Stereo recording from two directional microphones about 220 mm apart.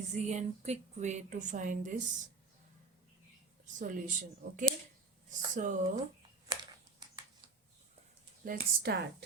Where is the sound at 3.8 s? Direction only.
35° right (ahead or behind).